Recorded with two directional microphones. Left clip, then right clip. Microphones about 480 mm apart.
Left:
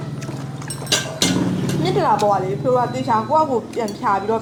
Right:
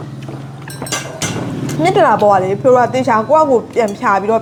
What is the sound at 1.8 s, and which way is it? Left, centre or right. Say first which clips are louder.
Speech: right 7 dB; right.